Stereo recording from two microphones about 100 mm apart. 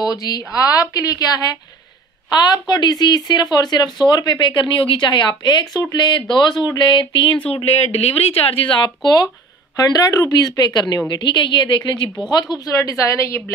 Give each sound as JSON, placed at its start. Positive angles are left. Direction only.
{"t": 0.1, "sound": "speech", "side_deg": 40}
{"t": 2.4, "sound": "speech", "side_deg": 45}
{"t": 7.5, "sound": "speech", "side_deg": 85}
{"t": 9.8, "sound": "speech", "side_deg": 40}